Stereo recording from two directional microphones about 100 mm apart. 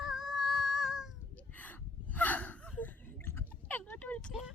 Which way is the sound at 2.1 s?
15° left (ahead or behind).